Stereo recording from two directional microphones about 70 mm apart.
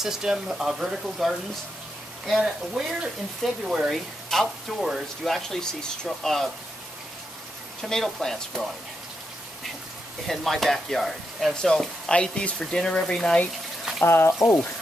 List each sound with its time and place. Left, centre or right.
0.0 s speech: centre
3.9 s speech: centre
7.8 s speech: centre
10.2 s speech: centre
14.0 s speech: left